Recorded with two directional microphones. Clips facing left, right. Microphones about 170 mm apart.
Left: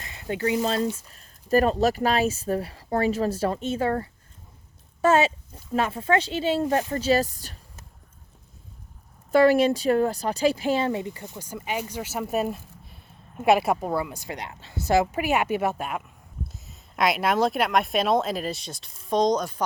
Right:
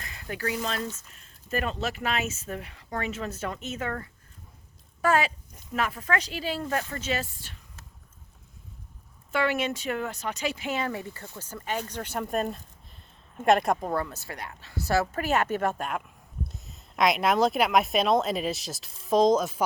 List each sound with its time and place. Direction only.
0.0 s a sound: 25° left (ahead or behind)
0.6 s speech: 30° left (ahead or behind)
9.3 s a woman's voice: 40° left (ahead or behind); by 19.6 s 5° right (ahead or behind)